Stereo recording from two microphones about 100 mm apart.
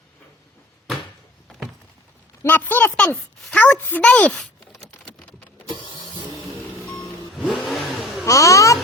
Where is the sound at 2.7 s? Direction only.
15° left (ahead or behind).